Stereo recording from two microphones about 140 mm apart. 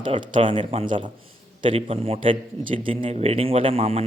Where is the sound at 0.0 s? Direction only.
35° right (ahead or behind).